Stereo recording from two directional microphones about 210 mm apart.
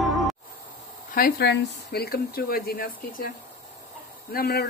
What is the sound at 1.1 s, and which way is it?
Speech, 45° left (ahead or behind).